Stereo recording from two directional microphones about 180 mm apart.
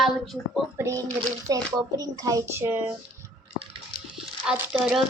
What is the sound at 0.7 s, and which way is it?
Speech, 15° right (ahead or behind).